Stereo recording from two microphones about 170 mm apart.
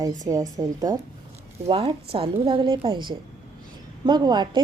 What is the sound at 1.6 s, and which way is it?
A woman's voice, 30° right (ahead or behind).